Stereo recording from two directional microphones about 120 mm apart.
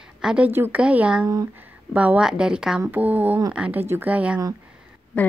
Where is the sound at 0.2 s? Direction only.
5° right (ahead or behind).